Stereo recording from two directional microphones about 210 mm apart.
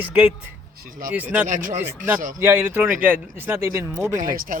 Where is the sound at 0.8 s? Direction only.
40° right (ahead or behind).